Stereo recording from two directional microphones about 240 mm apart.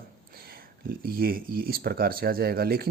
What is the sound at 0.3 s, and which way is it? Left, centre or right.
Speech, right.